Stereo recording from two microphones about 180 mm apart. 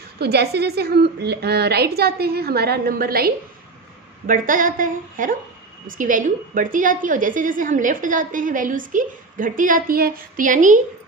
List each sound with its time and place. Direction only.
0.2 s a woman's voice: 65° right (ahead or behind); by 10.8 s 45° right (ahead or behind)